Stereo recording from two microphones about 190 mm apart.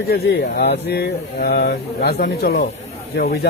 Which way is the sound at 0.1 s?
55° left (ahead or behind).